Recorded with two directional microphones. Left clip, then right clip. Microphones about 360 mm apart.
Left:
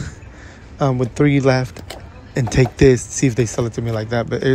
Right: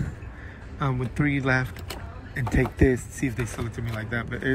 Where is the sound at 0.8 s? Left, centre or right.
Centre.